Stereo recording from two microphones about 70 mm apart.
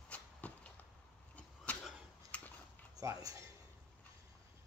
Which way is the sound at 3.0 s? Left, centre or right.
Right.